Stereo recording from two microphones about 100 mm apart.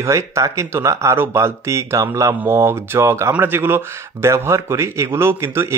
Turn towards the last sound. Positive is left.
turn(degrees=-25)  # may be behind; listen again after turning